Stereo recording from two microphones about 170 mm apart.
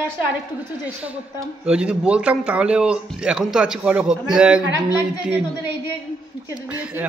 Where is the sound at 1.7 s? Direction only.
5° right (ahead or behind).